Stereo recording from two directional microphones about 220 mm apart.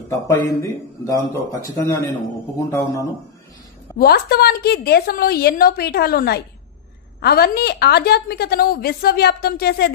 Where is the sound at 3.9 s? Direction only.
45° left (ahead or behind).